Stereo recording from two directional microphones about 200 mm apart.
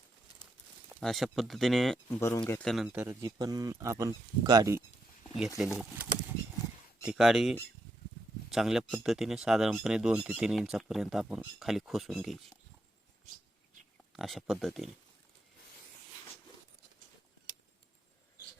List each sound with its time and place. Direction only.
0.9 s speech: centre (ahead or behind)
2.2 s speech: 15° left (ahead or behind)
2.6 s speech: centre (ahead or behind)
2.9 s speech: 10° right (ahead or behind)
5.5 s speech: 5° right (ahead or behind)
14.2 s speech: centre (ahead or behind)